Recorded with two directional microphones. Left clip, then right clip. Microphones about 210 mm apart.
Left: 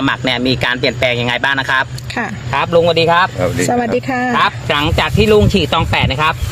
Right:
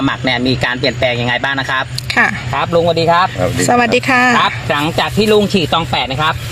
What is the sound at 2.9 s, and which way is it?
Speech, centre (ahead or behind).